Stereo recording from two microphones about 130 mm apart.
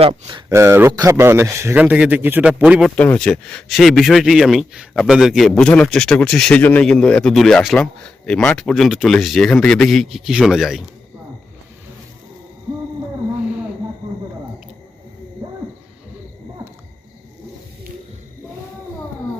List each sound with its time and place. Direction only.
0.5 s a man's voice: 20° right (ahead or behind)
2.9 s speech: 10° left (ahead or behind)
15.4 s owl: 35° right (ahead or behind)